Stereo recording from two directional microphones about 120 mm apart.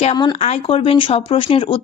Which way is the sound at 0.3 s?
60° left (ahead or behind).